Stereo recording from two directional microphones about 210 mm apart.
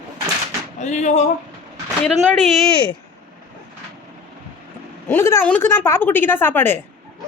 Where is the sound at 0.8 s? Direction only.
35° left (ahead or behind).